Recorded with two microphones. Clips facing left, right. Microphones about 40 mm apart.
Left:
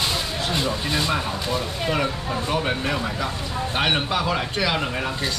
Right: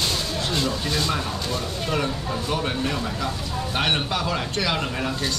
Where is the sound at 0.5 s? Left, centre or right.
Centre.